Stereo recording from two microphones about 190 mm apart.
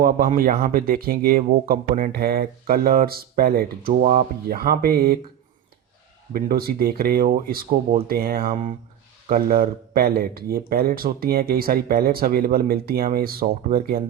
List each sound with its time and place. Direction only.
0.0 s speech: 50° right (ahead or behind)
6.3 s speech: 50° right (ahead or behind)